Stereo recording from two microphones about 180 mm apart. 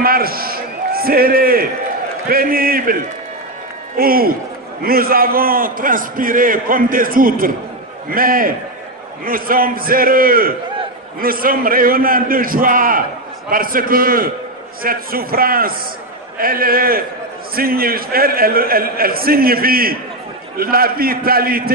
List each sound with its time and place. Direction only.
0.0 s a man's voice: 55° right (ahead or behind)